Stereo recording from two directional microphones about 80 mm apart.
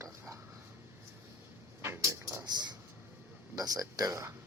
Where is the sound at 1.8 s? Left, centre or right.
Right.